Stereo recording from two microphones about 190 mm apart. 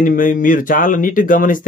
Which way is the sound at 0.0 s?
45° left (ahead or behind).